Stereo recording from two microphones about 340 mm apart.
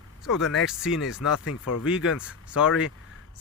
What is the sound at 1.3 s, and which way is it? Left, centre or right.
Speech, left.